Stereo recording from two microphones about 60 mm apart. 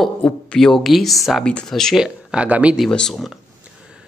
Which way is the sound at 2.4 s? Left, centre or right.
Right.